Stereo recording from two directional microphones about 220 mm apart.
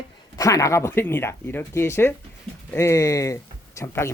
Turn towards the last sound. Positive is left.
turn(degrees=10)  # may be behind; listen again after turning